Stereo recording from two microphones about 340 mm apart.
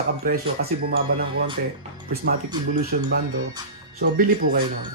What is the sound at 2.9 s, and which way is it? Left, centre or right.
Speech, right.